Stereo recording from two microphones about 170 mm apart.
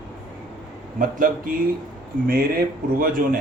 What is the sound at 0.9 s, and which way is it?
A man's voice, 55° right (ahead or behind).